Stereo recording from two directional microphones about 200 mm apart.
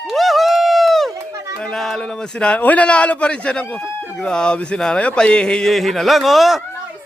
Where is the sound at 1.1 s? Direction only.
15° right (ahead or behind).